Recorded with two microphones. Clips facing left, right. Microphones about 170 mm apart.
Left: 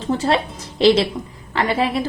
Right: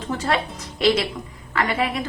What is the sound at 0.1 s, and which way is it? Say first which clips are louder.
A woman's voice: left 5 dB; 30° left (ahead or behind).